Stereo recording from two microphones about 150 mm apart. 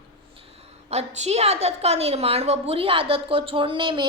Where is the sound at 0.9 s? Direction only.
45° right (ahead or behind).